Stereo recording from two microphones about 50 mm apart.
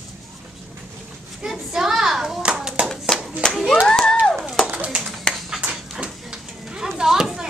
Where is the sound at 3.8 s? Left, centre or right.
Centre.